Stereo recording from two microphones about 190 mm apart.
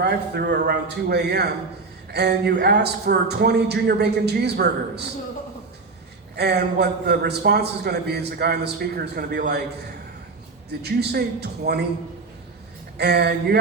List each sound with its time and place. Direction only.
0.0 s a man's voice: 60° right (ahead or behind)
6.3 s a man's voice: 60° right (ahead or behind)
10.7 s a man's voice: 60° right (ahead or behind)
13.0 s a man's voice: 60° right (ahead or behind)